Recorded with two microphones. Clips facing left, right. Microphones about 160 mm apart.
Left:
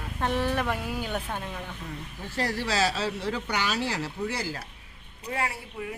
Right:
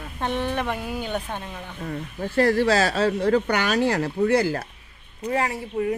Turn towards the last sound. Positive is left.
turn(degrees=-35)  # may be behind; listen again after turning